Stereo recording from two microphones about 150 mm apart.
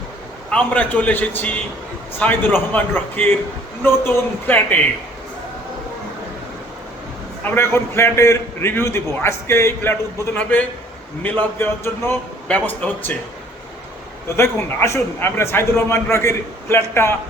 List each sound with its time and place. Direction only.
0.5 s a man's voice: 10° left (ahead or behind)
7.4 s a man's voice: 15° left (ahead or behind)
14.3 s a man's voice: 20° left (ahead or behind)